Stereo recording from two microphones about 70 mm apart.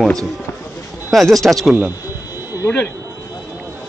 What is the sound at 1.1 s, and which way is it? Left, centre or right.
Speech, centre.